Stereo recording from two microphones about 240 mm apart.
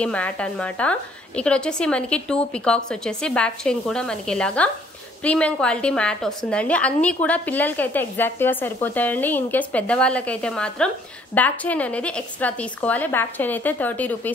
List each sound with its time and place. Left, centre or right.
0.0 s a woman's voice: centre